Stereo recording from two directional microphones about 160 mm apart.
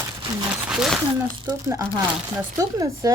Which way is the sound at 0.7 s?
5° right (ahead or behind).